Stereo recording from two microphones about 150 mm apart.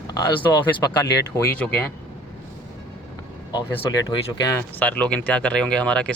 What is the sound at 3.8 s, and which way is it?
Speech, 25° left (ahead or behind).